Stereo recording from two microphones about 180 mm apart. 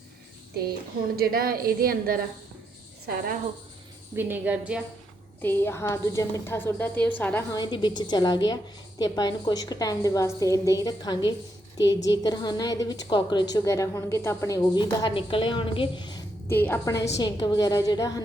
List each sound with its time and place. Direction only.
1.1 s a woman's voice: 55° right (ahead or behind)
4.1 s a woman's voice: 10° right (ahead or behind)
5.4 s a woman's voice: 10° left (ahead or behind)
7.5 s a woman's voice: 25° left (ahead or behind)
16.5 s a woman's voice: 10° left (ahead or behind)